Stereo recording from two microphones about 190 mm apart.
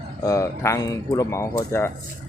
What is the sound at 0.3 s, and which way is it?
Speech, 15° left (ahead or behind).